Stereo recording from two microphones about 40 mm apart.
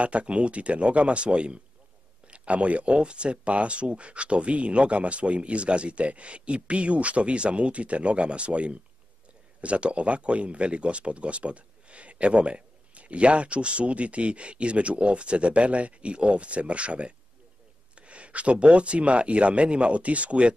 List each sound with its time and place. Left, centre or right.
0.0 s speech: right